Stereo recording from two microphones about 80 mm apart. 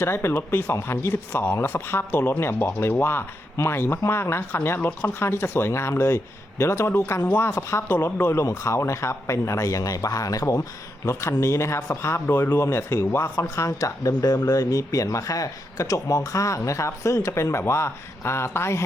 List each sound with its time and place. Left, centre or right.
0.0 s speech: left
7.5 s speech: left
7.9 s speech: left
13.7 s speech: left